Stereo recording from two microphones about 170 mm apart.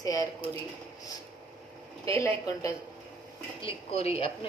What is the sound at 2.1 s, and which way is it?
Speech, 20° left (ahead or behind).